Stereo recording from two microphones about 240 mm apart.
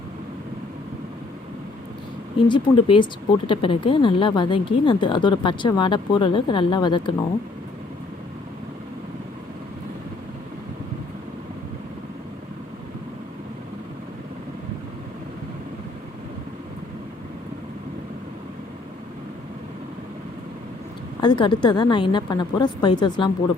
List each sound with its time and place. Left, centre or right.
2.5 s speech: left
21.2 s speech: centre